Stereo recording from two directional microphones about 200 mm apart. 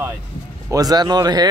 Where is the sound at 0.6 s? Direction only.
20° right (ahead or behind).